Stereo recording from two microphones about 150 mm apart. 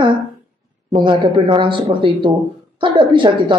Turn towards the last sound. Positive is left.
turn(degrees=-35)  # may be behind; listen again after turning